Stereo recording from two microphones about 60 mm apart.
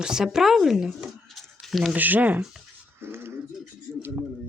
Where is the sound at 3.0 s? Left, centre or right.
Right.